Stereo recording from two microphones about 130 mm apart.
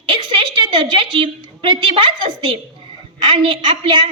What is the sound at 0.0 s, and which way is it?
A woman's voice, 40° right (ahead or behind).